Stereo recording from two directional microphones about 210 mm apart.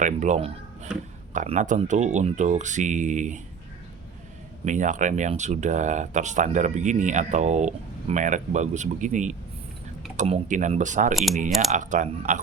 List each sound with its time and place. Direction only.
0.0 s speech: 35° right (ahead or behind)
4.6 s speech: 35° right (ahead or behind)
11.1 s speech: centre (ahead or behind)
11.7 s speech: 35° right (ahead or behind)